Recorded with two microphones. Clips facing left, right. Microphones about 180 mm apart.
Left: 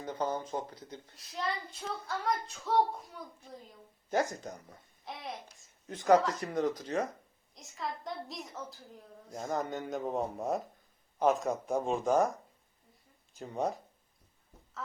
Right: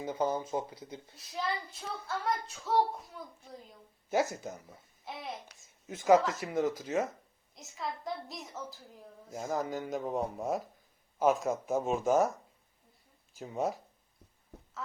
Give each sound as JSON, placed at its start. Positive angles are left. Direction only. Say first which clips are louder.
{"t": 0.0, "sound": "a child's voice", "louder": "right 2 dB", "side_deg": -10}
{"t": 13.3, "sound": "a child's voice", "louder": "even", "side_deg": 0}
{"t": 14.5, "sound": "a sound", "louder": "right 8 dB", "side_deg": -70}